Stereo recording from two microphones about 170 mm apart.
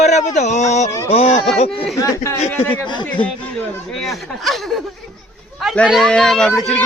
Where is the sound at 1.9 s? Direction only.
20° left (ahead or behind).